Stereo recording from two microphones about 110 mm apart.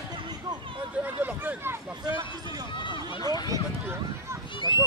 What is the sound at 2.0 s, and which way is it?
Speech, 35° right (ahead or behind).